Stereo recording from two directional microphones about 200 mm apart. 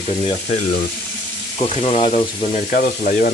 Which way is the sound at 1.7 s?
30° left (ahead or behind).